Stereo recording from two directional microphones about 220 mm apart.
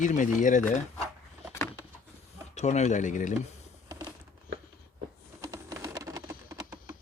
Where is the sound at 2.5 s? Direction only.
30° left (ahead or behind).